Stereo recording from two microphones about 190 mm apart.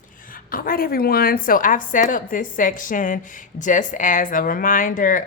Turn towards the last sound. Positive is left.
turn(degrees=45)  # may be behind; listen again after turning